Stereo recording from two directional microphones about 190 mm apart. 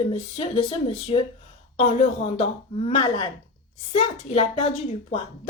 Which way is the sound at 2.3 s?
35° left (ahead or behind).